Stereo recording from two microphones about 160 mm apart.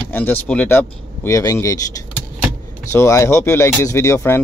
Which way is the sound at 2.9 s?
20° left (ahead or behind).